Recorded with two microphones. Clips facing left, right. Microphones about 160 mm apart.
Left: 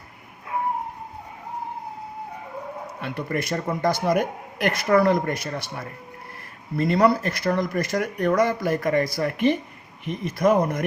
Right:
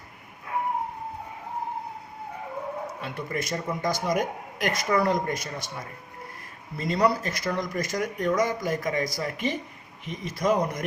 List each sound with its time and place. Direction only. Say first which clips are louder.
3.0 s speech: left 4 dB; 60° left (ahead or behind)
6.7 s speech: left 5 dB; 60° left (ahead or behind)